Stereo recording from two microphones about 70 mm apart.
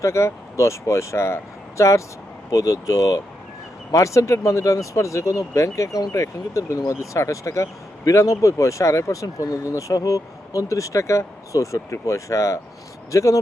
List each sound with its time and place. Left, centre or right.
0.0 s speech: left